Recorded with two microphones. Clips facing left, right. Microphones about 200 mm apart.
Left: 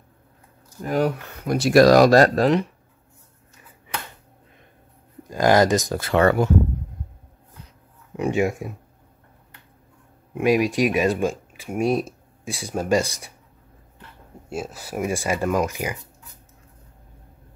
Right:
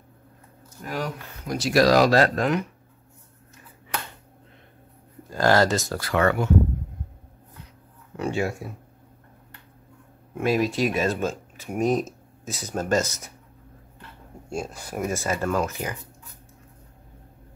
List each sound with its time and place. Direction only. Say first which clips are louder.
0.8 s speech: left 8 dB; 55° left (ahead or behind); by 2.6 s 35° left (ahead or behind)
5.3 s speech: left 3 dB; 15° left (ahead or behind); by 6.5 s 35° left (ahead or behind)
8.2 s speech: left 4 dB; 15° left (ahead or behind)
10.3 s speech: left 4 dB; 15° left (ahead or behind)
14.5 s speech: left 1 dB; 5° left (ahead or behind)